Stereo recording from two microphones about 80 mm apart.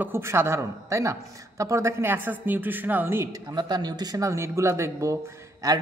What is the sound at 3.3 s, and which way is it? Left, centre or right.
Speech, right.